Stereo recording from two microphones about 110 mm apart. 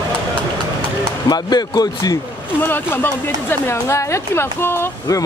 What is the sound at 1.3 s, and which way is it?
Speech, 40° left (ahead or behind).